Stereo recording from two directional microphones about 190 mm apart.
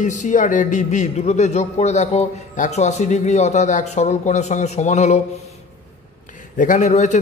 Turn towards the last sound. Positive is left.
turn(degrees=40)  # may be behind; listen again after turning